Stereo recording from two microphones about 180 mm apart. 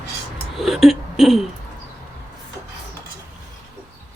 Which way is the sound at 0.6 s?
Centre (ahead or behind).